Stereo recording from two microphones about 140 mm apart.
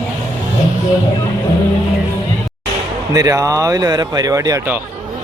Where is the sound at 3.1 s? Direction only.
25° right (ahead or behind).